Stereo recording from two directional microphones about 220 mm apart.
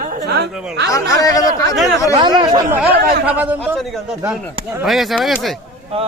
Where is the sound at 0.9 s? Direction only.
15° left (ahead or behind).